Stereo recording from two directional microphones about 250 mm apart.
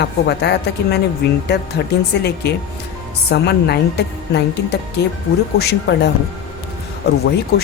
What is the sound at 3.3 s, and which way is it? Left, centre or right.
A woman's voice, left.